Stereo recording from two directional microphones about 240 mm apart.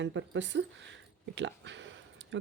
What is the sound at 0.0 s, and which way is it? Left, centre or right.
Speech, right.